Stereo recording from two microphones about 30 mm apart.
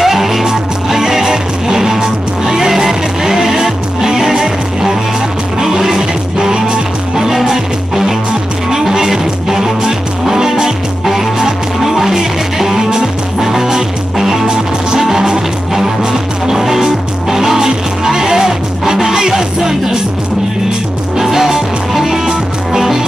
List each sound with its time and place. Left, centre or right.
0.0 s music: centre
21.2 s music: centre
22.7 s music: centre